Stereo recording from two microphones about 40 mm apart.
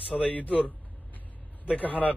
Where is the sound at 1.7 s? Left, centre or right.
Left.